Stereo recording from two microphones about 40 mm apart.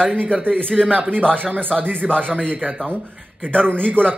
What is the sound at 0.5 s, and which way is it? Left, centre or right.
Speech, centre.